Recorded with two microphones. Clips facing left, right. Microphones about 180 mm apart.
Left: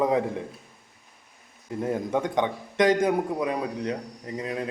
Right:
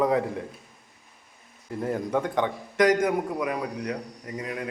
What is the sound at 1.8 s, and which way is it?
A man's voice, 20° left (ahead or behind).